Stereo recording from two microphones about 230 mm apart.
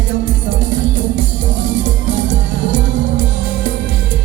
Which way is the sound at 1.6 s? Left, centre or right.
Right.